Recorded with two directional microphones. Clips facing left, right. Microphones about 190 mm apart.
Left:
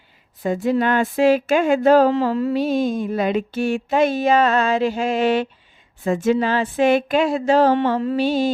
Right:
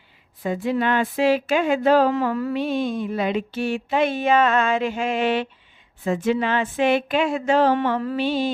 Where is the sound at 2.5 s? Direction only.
40° left (ahead or behind).